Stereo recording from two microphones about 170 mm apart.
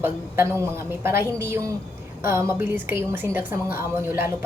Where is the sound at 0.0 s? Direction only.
15° right (ahead or behind).